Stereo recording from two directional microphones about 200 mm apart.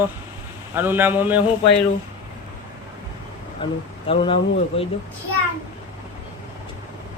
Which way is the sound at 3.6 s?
25° left (ahead or behind).